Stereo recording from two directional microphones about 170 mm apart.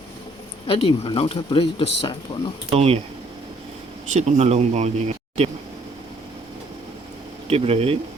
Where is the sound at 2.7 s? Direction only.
35° right (ahead or behind).